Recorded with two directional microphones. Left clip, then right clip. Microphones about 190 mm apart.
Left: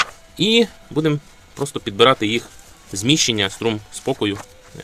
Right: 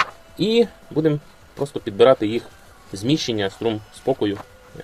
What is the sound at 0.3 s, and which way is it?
Speech, 50° left (ahead or behind).